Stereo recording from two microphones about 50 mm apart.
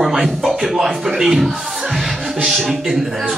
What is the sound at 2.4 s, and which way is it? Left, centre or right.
Speech, centre.